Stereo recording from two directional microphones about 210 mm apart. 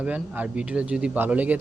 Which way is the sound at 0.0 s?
5° right (ahead or behind).